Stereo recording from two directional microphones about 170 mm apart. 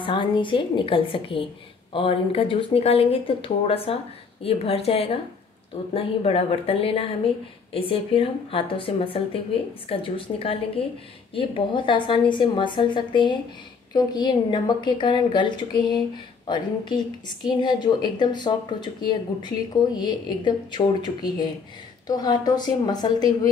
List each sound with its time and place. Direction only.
0.0 s speech: 30° left (ahead or behind)